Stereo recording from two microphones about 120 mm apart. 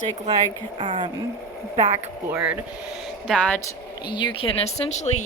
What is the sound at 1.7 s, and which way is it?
Speech, 65° right (ahead or behind).